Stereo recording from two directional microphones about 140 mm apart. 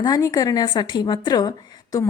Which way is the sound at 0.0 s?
25° left (ahead or behind).